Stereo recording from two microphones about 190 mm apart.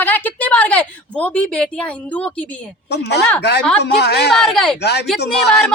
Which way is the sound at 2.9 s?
60° left (ahead or behind).